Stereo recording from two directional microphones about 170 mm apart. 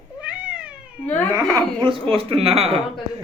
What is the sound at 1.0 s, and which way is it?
Speech, 10° left (ahead or behind).